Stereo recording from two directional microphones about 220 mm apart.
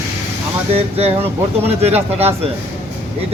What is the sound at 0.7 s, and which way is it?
Speech, 25° right (ahead or behind).